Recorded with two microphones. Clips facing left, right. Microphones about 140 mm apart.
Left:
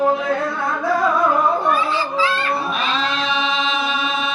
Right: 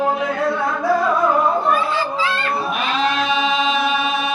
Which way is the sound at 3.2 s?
15° right (ahead or behind).